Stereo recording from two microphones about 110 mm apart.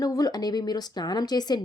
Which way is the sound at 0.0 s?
35° left (ahead or behind).